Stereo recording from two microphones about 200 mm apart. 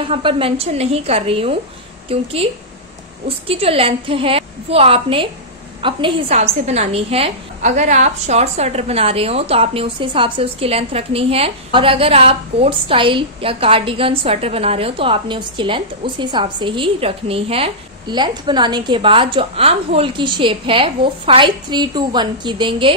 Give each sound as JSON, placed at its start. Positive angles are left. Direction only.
{"t": 0.0, "sound": "a woman's voice", "side_deg": -25}